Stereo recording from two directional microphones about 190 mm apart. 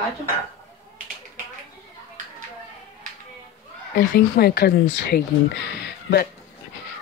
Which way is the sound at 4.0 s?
50° left (ahead or behind).